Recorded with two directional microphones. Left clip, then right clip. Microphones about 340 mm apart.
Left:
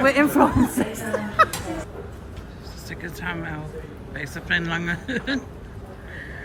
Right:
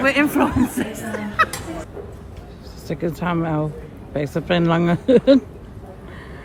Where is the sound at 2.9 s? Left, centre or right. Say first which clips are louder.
Right 8 dB; centre.